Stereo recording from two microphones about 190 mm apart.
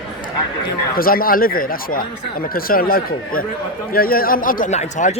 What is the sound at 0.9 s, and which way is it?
Speech, 50° left (ahead or behind).